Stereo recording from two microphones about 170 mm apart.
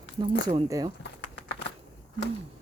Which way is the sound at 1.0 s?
90° left.